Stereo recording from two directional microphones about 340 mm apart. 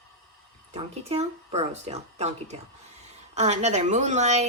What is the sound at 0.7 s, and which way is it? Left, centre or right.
Speech, centre.